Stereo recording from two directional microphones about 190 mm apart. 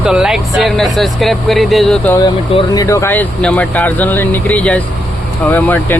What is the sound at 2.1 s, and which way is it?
Speech, 25° left (ahead or behind).